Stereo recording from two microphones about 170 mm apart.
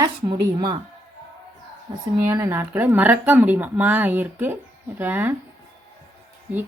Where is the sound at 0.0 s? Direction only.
25° right (ahead or behind).